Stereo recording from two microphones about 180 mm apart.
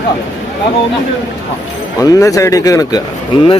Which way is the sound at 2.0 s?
20° left (ahead or behind).